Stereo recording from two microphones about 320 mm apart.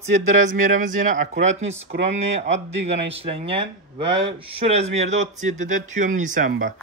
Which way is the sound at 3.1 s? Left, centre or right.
Centre.